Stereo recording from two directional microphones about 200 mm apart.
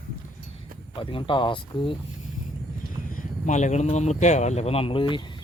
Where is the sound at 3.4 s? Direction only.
35° left (ahead or behind).